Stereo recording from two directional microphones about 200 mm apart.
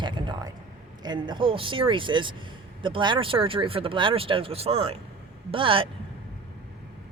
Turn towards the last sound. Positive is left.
turn(degrees=-25)  # may be behind; listen again after turning